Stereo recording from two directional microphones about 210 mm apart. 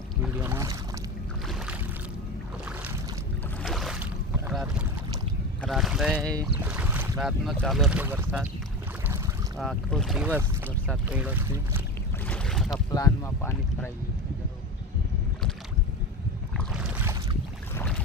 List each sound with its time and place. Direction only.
0.2 s boat: 10° right (ahead or behind)
3.6 s boat: centre (ahead or behind)
5.6 s speech: centre (ahead or behind)
6.3 s speech: 15° right (ahead or behind)
9.6 s speech: centre (ahead or behind)
12.2 s boat: 5° left (ahead or behind)
12.9 s speech: 15° left (ahead or behind)
16.6 s boat: 5° right (ahead or behind)
17.7 s boat: 5° left (ahead or behind)